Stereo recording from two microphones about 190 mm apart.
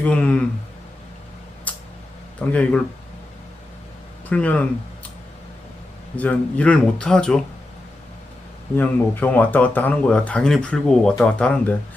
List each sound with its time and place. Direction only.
0.0 s speech: 5° left (ahead or behind)
1.7 s a sound: 10° left (ahead or behind)
2.5 s speech: 5° left (ahead or behind)
4.3 s speech: 10° left (ahead or behind)
6.1 s speech: 10° left (ahead or behind)
8.7 s speech: 10° left (ahead or behind)